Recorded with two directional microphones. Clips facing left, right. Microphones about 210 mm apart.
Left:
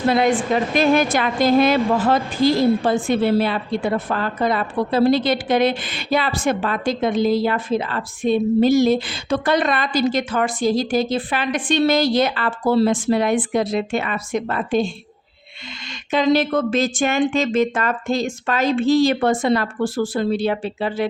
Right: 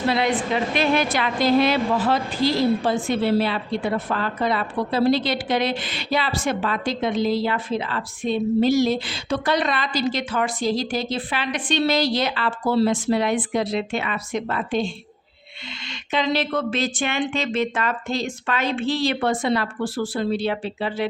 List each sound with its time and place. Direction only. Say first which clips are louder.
0.1 s a woman's voice: left 5 dB; 45° left (ahead or behind)
16.1 s a woman's voice: left 6 dB; 45° left (ahead or behind)